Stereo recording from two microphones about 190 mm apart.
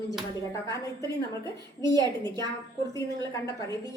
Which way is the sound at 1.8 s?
20° right (ahead or behind).